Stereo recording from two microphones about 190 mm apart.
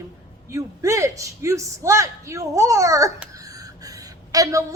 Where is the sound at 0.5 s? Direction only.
15° right (ahead or behind).